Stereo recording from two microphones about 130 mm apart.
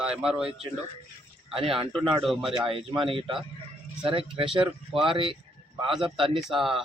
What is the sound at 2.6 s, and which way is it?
Speech, 40° right (ahead or behind).